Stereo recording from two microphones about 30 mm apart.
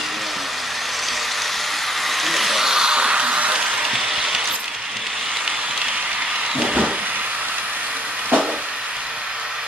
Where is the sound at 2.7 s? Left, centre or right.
Right.